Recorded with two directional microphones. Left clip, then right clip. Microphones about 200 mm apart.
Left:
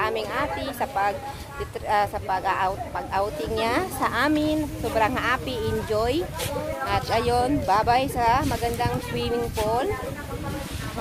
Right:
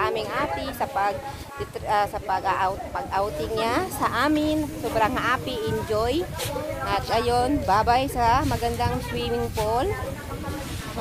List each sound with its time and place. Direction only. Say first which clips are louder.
0.0 s speech: even; 5° right (ahead or behind)